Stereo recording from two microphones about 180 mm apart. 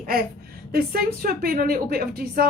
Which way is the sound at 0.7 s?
55° right (ahead or behind).